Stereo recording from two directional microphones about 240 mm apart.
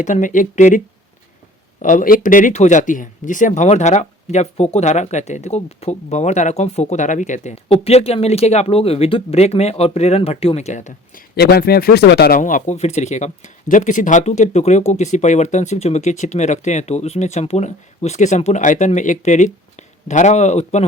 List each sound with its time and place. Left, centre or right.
0.0 s speech: left
1.8 s speech: left